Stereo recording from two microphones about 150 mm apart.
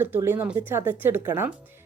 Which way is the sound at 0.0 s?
15° right (ahead or behind).